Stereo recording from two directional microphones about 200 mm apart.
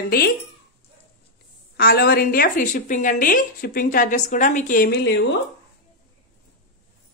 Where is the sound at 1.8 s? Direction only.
45° left (ahead or behind).